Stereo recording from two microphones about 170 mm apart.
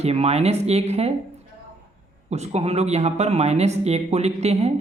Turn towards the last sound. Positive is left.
turn(degrees=-40)  # may be behind; listen again after turning